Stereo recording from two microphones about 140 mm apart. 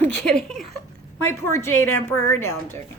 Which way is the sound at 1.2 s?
15° left (ahead or behind).